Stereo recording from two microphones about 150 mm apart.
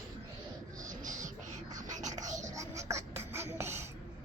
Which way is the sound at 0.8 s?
55° right (ahead or behind).